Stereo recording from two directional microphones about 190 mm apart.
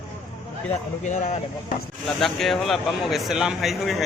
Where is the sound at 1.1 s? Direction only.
40° left (ahead or behind).